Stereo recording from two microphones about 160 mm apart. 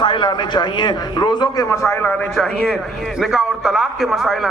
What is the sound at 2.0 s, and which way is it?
A man's voice, centre (ahead or behind).